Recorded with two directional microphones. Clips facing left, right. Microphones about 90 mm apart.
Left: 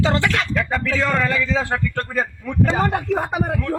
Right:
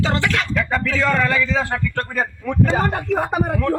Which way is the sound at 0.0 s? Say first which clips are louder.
Left 1 dB; 25° left (ahead or behind).